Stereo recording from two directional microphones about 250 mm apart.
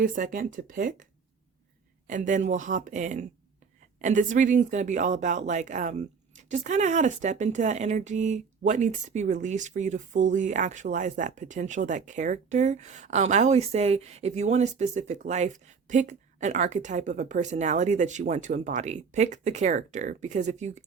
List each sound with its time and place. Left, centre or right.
0.0 s speech: right
2.0 s speech: right